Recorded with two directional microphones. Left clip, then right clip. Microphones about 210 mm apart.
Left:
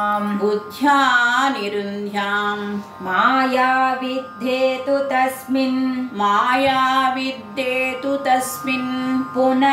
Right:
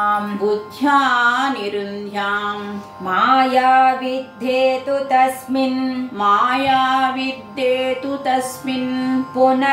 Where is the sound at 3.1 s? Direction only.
15° right (ahead or behind).